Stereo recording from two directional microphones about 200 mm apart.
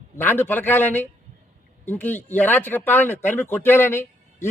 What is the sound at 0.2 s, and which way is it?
A man's voice, 10° left (ahead or behind).